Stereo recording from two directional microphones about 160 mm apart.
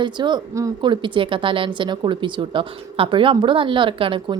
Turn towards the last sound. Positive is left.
turn(degrees=-30)  # may be behind; listen again after turning